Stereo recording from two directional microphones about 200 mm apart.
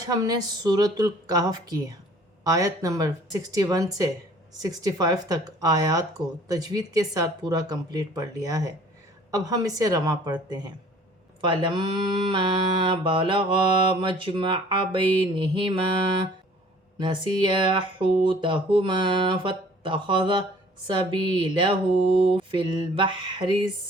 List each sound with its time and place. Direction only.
0.1 s speech: 20° right (ahead or behind)
11.6 s speech: 20° right (ahead or behind)
17.0 s speech: 20° right (ahead or behind)